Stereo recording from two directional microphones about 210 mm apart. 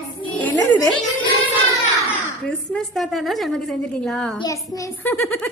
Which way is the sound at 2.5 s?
5° left (ahead or behind).